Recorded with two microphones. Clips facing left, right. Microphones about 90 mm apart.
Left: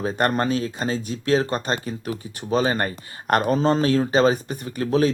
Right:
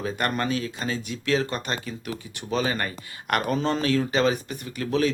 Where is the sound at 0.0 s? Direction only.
35° left (ahead or behind).